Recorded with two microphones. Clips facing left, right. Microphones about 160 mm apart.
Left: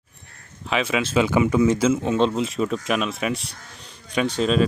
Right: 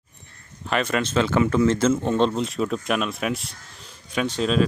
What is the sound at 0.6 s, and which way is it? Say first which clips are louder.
Speech: even; centre (ahead or behind).